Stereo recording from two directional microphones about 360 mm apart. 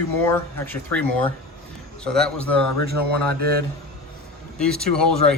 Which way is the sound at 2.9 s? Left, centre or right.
Right.